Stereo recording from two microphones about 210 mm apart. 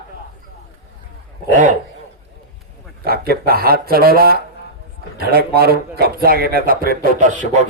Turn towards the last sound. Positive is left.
turn(degrees=-35)  # may be behind; listen again after turning